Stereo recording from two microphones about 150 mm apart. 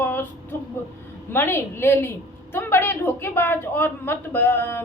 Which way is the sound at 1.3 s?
15° left (ahead or behind).